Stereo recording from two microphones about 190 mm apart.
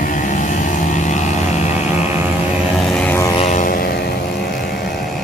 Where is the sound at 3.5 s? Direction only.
45° left (ahead or behind).